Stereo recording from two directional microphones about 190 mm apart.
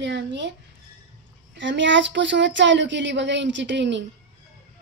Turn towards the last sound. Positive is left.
turn(degrees=-70)  # may be behind; listen again after turning